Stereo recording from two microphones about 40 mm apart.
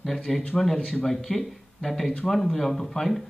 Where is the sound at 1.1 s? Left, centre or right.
Centre.